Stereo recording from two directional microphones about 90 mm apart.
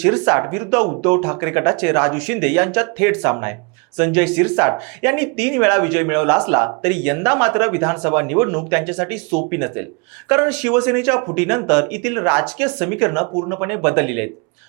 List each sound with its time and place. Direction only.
0.0 s speech: 20° right (ahead or behind)